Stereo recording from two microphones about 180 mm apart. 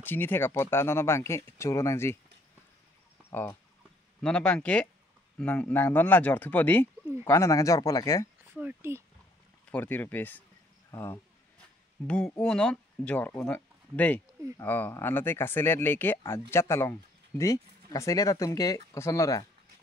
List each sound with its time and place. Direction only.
0.0 s speech: 10° left (ahead or behind)
3.3 s speech: 15° left (ahead or behind)
8.5 s speech: 10° right (ahead or behind)
9.7 s speech: 10° left (ahead or behind)